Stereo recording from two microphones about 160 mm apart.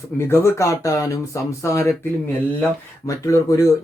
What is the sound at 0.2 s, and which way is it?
Speech, 15° left (ahead or behind).